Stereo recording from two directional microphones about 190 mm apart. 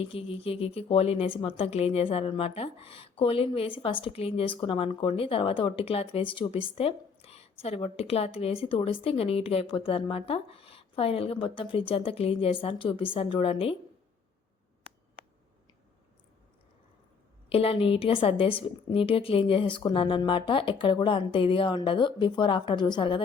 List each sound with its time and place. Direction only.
0.0 s a woman's voice: 30° left (ahead or behind)
17.5 s a woman's voice: 30° left (ahead or behind)